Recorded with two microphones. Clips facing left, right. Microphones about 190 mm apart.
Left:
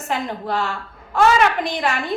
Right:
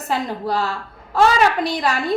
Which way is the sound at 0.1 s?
35° right (ahead or behind).